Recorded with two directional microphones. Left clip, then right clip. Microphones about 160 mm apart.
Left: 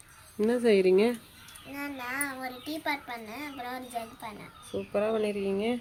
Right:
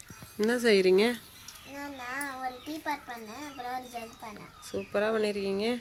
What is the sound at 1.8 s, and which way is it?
Child singing, 35° left (ahead or behind).